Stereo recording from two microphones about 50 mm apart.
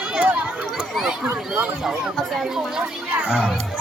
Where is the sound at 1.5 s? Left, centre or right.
Centre.